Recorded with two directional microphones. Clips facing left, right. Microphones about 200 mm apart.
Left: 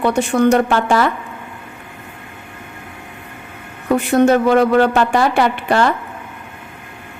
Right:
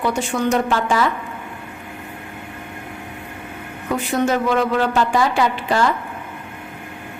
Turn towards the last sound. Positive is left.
turn(degrees=60)  # may be behind; listen again after turning